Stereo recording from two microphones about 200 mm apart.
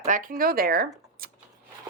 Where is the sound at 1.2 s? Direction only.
45° right (ahead or behind).